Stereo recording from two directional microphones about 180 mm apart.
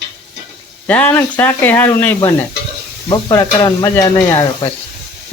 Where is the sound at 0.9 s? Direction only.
10° left (ahead or behind).